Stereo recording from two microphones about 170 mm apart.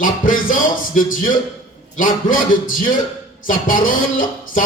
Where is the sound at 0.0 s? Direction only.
55° left (ahead or behind).